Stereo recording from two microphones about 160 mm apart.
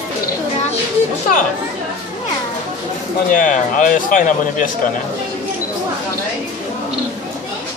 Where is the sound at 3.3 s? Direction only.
55° left (ahead or behind).